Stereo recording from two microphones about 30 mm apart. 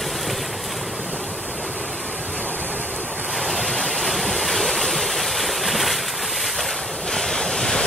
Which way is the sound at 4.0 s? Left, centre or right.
Centre.